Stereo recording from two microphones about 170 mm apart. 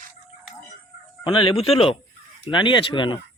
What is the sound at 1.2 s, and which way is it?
Speech, 30° left (ahead or behind).